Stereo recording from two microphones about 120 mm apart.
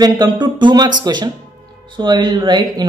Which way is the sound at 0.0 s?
35° right (ahead or behind).